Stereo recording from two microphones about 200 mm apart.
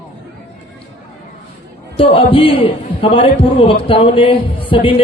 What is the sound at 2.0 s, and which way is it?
A man's voice, 25° left (ahead or behind).